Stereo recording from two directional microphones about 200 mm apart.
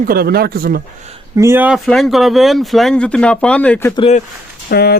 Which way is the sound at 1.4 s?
10° right (ahead or behind).